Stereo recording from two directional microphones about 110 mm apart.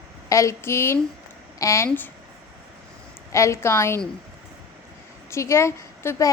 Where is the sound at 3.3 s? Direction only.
25° left (ahead or behind).